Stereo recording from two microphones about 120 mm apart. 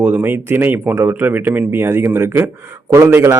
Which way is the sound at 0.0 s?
15° right (ahead or behind).